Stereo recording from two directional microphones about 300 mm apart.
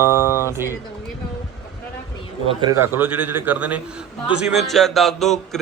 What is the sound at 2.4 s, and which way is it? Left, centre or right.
A man's voice, centre.